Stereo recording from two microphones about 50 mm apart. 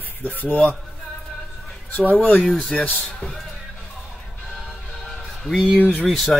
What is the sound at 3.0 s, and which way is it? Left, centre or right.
Speech, centre.